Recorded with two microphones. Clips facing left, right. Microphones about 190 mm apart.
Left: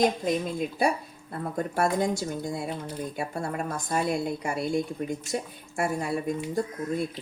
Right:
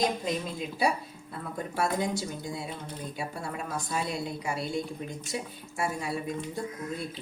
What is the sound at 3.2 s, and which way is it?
A woman's voice, 50° left (ahead or behind).